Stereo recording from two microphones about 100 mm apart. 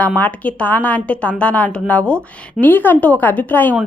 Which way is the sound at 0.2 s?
15° left (ahead or behind).